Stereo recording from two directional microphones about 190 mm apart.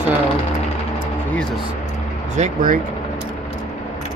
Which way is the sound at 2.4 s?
40° right (ahead or behind).